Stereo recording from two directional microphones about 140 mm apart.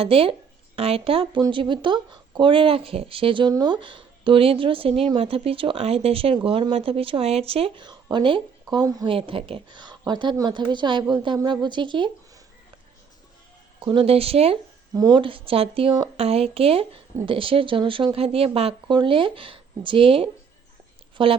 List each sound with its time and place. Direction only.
0.0 s speech: 40° right (ahead or behind)
7.9 s speech: 30° right (ahead or behind)
9.0 s speech: 40° right (ahead or behind)
13.7 s speech: 40° right (ahead or behind)
14.9 s speech: 30° right (ahead or behind)